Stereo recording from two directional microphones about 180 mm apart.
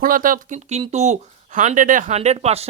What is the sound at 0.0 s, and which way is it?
Speech, 50° right (ahead or behind).